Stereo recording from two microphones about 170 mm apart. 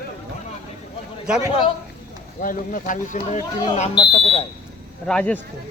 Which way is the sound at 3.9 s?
35° left (ahead or behind).